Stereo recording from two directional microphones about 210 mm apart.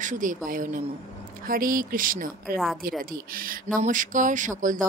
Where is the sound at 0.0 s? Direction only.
40° right (ahead or behind).